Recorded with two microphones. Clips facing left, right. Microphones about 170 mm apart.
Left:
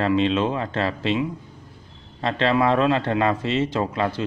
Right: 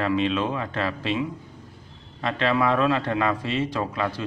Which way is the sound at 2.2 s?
30° left (ahead or behind).